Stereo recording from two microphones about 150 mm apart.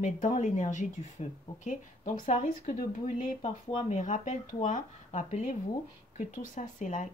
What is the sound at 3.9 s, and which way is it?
Speech, 55° left (ahead or behind).